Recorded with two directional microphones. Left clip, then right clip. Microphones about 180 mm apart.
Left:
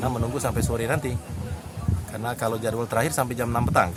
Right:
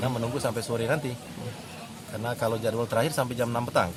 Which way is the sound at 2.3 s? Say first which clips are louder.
Left 1 dB; 10° left (ahead or behind).